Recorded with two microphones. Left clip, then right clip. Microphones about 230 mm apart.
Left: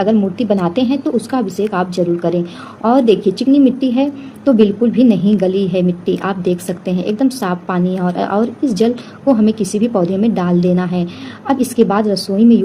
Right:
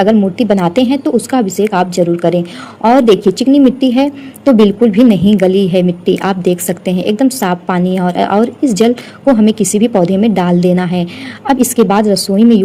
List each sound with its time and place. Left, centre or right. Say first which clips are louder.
0.0 s a woman's voice: right 4 dB; right